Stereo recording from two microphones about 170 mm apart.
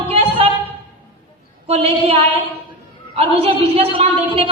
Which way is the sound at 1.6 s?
35° right (ahead or behind).